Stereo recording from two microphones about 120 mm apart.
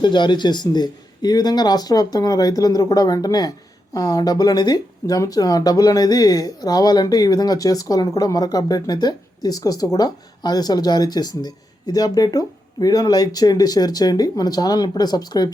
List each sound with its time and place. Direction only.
0.0 s speech: 40° left (ahead or behind)